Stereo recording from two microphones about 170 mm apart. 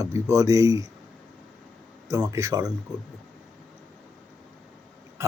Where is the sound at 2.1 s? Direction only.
20° right (ahead or behind).